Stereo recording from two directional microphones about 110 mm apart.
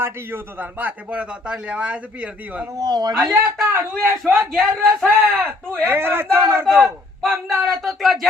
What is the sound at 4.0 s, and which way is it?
Speech, 20° right (ahead or behind).